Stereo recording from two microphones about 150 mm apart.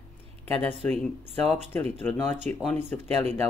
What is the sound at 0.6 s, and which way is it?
Speech, 10° left (ahead or behind).